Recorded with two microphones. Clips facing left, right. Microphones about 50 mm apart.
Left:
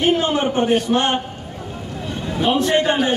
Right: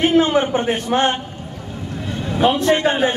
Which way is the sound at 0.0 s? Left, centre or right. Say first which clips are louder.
Right 3 dB; right.